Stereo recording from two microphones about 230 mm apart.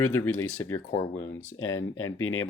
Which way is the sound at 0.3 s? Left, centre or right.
Left.